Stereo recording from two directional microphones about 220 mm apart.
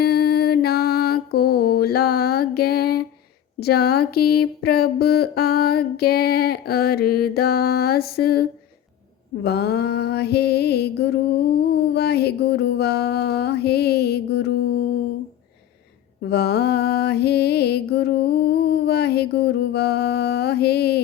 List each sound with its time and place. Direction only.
0.0 s mantra: 45° left (ahead or behind)
3.6 s speech: 45° left (ahead or behind)
11.5 s a sound: 45° left (ahead or behind)
16.2 s music: 50° left (ahead or behind)